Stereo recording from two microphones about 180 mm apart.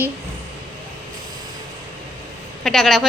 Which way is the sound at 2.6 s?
Centre (ahead or behind).